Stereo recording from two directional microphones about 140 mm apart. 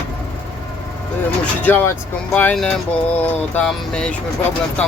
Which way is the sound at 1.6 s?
15° left (ahead or behind).